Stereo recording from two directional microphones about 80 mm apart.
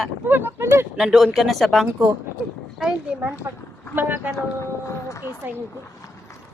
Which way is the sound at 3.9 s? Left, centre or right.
Right.